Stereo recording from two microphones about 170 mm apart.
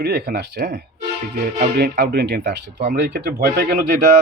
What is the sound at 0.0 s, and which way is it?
Speech, 70° right (ahead or behind).